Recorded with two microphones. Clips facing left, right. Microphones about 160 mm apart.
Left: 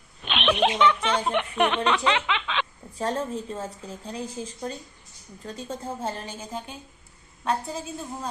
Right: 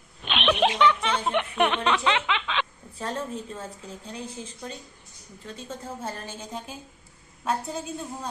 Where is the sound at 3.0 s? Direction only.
35° left (ahead or behind).